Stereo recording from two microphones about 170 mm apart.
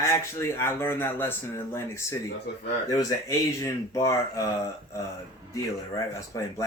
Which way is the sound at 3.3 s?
20° left (ahead or behind).